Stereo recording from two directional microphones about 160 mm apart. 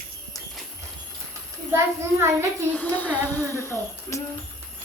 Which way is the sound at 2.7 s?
10° left (ahead or behind).